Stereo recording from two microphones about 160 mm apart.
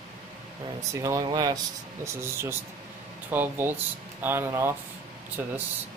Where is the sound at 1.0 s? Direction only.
25° right (ahead or behind).